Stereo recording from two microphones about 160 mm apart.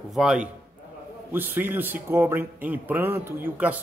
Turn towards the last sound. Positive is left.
turn(degrees=-10)  # may be behind; listen again after turning